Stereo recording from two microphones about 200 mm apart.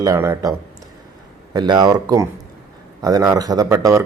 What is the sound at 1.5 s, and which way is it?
Speech, 20° right (ahead or behind).